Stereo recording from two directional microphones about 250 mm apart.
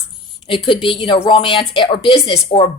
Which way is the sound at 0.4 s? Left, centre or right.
Centre.